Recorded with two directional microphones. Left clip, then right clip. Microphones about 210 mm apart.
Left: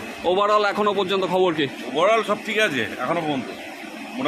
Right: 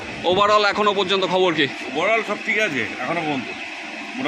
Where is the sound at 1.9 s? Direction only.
15° left (ahead or behind).